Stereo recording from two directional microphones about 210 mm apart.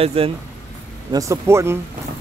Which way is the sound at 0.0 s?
30° right (ahead or behind).